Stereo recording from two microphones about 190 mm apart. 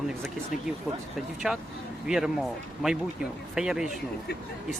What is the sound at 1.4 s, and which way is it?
Speech, 5° right (ahead or behind).